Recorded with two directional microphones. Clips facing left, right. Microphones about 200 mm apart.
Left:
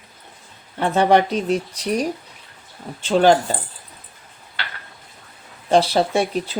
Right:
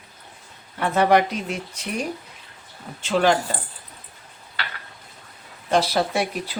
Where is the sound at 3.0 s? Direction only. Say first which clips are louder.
Left 4 dB; 30° left (ahead or behind).